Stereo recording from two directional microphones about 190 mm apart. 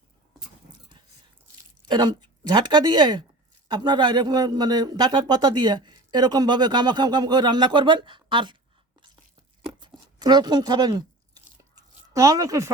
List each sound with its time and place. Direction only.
1.9 s a man's voice: 25° right (ahead or behind)
9.8 s speech: 20° right (ahead or behind)
11.7 s a sound: 15° right (ahead or behind)